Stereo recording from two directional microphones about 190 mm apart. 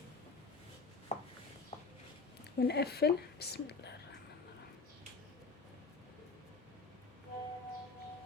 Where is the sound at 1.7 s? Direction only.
35° left (ahead or behind).